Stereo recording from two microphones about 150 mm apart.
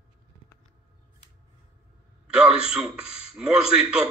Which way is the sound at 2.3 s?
5° right (ahead or behind).